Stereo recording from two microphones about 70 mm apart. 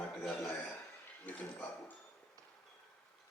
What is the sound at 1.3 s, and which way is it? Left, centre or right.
Speech, centre.